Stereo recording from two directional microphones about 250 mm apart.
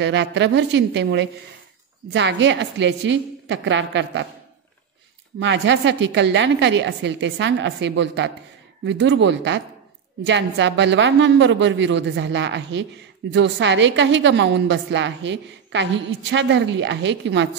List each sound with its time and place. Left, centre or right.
0.0 s a woman's voice: right
5.4 s a woman's voice: right